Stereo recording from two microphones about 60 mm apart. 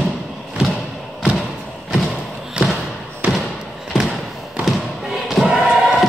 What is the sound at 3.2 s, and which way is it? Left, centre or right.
Thump, right.